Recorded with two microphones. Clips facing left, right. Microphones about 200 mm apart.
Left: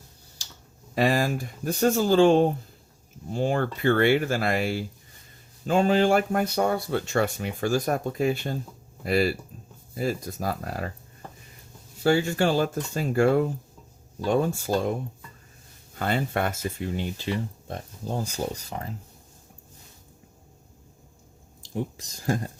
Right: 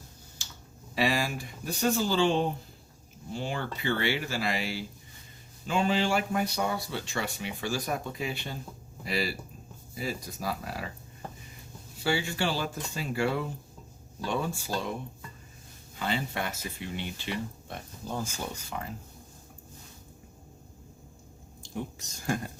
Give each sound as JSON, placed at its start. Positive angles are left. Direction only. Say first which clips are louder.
{"t": 0.9, "sound": "speech", "louder": "left 5 dB", "side_deg": 45}
{"t": 12.0, "sound": "speech", "louder": "left 8 dB", "side_deg": 45}
{"t": 16.0, "sound": "speech", "louder": "left 6 dB", "side_deg": 50}
{"t": 21.8, "sound": "speech", "louder": "left 5 dB", "side_deg": 35}